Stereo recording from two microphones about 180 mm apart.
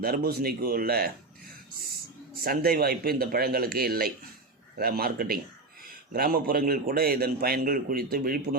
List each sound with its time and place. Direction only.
0.0 s a man's voice: 55° right (ahead or behind)
2.3 s a man's voice: 55° right (ahead or behind)